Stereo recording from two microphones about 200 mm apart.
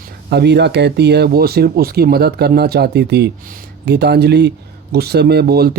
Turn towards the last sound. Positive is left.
turn(degrees=-50)  # may be behind; listen again after turning